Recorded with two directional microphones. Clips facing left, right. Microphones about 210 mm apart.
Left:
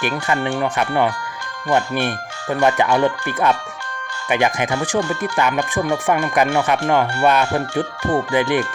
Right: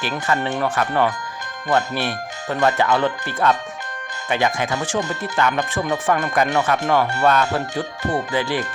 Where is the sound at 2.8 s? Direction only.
15° left (ahead or behind).